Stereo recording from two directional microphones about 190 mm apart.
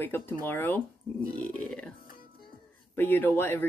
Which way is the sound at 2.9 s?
10° left (ahead or behind).